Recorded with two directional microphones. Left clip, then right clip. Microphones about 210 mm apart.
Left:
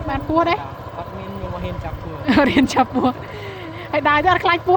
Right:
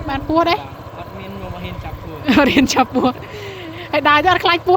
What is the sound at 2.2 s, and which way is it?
Speech, 15° right (ahead or behind).